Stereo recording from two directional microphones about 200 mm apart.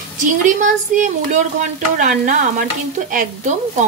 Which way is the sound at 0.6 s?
40° right (ahead or behind).